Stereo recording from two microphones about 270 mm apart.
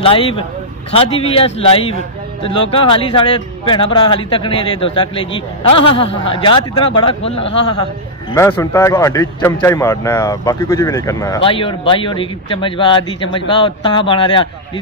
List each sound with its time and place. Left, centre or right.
0.0 s a man's voice: centre
8.3 s a man's voice: centre